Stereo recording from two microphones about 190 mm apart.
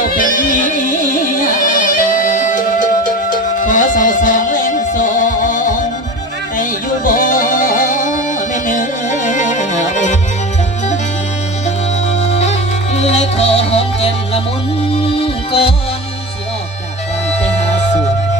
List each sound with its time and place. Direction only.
0.0 s music: 45° left (ahead or behind)
6.6 s music: 45° left (ahead or behind)
12.2 s music: 35° left (ahead or behind)
15.1 s music: 30° left (ahead or behind)
17.4 s music: 35° left (ahead or behind)